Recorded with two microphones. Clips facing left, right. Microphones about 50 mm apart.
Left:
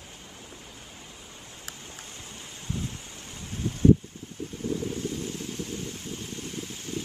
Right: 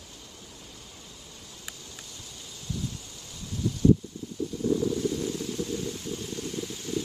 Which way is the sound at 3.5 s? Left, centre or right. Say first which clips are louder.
Left 2 dB; left.